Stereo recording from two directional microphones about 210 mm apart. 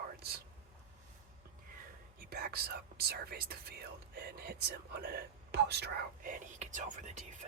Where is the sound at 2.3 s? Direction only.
50° right (ahead or behind).